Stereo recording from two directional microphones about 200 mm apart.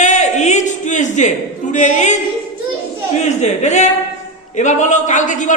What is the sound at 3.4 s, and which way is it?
Speech, 35° left (ahead or behind).